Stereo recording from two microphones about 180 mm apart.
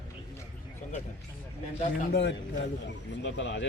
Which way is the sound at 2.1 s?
75° left (ahead or behind).